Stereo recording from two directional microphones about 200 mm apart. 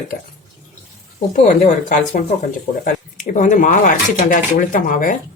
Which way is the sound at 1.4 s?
40° left (ahead or behind).